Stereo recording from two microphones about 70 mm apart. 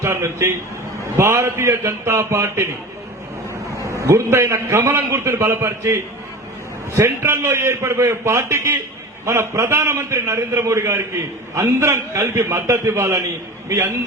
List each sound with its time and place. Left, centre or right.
0.0 s a man's voice: right
3.9 s a man's voice: right